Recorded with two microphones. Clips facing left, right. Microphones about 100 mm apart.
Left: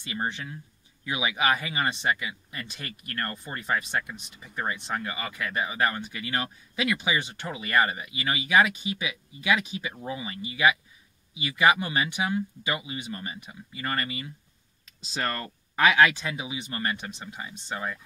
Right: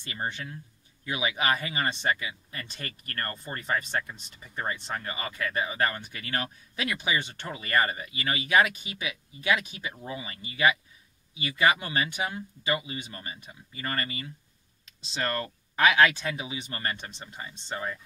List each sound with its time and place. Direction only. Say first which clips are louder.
0.1 s speech: left 2 dB; 20° left (ahead or behind)
15.4 s speech: left 1 dB; 30° left (ahead or behind)